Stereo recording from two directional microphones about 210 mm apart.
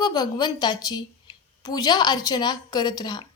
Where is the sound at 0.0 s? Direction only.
20° left (ahead or behind).